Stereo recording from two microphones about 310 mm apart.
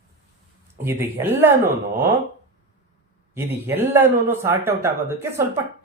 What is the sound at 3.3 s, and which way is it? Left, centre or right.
Speech, centre.